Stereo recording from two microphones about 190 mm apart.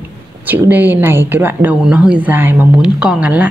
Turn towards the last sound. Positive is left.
turn(degrees=-5)  # may be behind; listen again after turning